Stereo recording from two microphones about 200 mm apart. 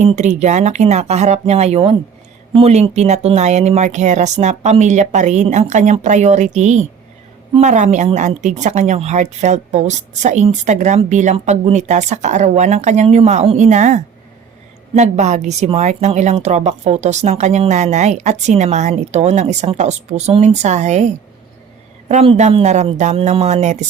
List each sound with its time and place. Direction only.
0.0 s a woman's voice: 35° right (ahead or behind)